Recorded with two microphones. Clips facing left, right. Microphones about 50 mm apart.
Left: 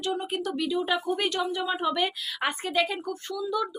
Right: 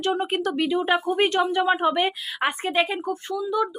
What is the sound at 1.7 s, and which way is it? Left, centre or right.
A woman's voice, right.